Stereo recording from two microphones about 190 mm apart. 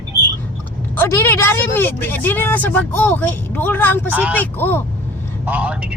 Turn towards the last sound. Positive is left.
turn(degrees=-10)  # may be behind; listen again after turning